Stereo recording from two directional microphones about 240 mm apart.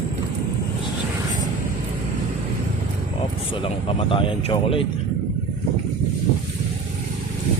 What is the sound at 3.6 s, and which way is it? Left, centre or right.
Speech, left.